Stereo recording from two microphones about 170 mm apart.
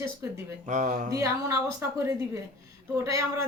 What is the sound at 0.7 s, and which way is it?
Speech, 45° right (ahead or behind).